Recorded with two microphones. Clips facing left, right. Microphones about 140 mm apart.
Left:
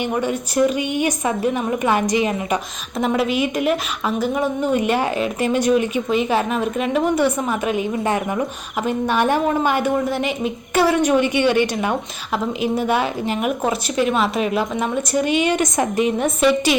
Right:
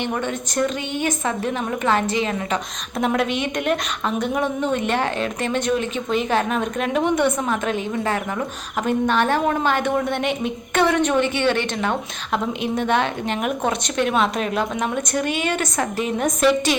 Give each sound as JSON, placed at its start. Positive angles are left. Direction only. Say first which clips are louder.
{"t": 0.0, "sound": "a woman's voice", "louder": "left 3 dB", "side_deg": 10}
{"t": 3.0, "sound": "speech", "louder": "left 2 dB", "side_deg": 5}
{"t": 7.9, "sound": "a woman's voice", "louder": "left 3 dB", "side_deg": 20}